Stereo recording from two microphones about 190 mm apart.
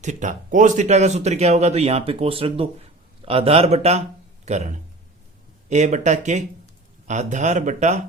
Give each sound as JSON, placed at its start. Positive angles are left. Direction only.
{"t": 0.0, "sound": "speech", "side_deg": -40}